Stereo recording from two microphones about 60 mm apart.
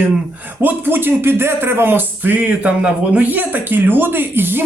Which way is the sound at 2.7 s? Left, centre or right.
Centre.